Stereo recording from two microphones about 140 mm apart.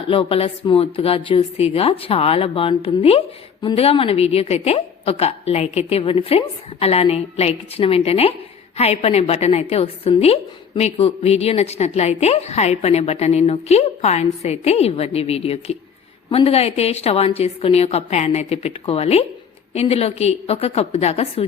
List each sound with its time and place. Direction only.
0.1 s a woman's voice: 40° left (ahead or behind)